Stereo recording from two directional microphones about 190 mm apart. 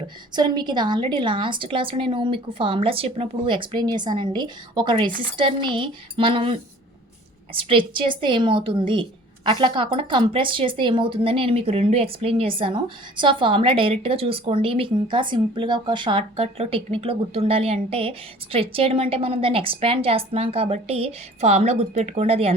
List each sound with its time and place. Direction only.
0.3 s a woman's voice: 25° right (ahead or behind)